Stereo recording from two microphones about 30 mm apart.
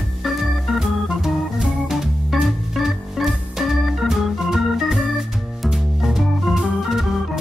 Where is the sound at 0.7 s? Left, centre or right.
Centre.